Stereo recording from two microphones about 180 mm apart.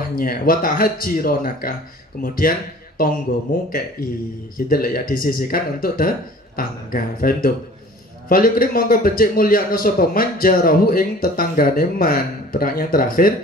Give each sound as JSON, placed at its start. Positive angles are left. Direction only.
{"t": 0.1, "sound": "a man's voice", "side_deg": 55}